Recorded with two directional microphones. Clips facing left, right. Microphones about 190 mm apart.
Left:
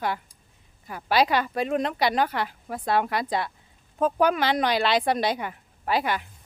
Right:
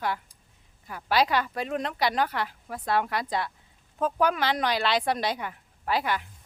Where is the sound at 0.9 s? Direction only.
20° left (ahead or behind).